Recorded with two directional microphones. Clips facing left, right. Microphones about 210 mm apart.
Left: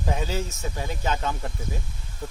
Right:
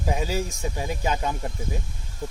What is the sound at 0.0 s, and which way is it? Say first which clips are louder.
Speech: right 2 dB; 10° right (ahead or behind).